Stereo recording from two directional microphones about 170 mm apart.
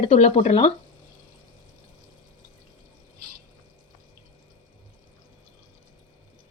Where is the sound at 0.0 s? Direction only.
35° left (ahead or behind).